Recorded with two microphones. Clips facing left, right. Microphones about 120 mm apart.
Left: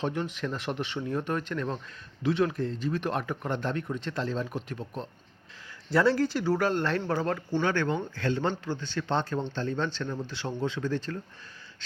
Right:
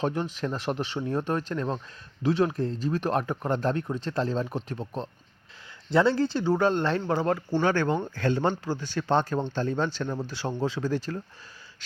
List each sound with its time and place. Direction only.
0.0 s speech: 35° right (ahead or behind)
7.6 s speech: 40° right (ahead or behind)